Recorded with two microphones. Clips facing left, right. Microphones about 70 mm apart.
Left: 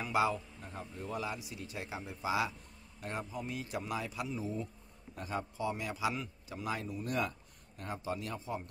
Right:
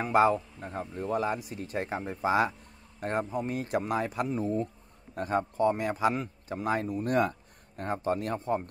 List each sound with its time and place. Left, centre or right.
0.0 s a man's voice: right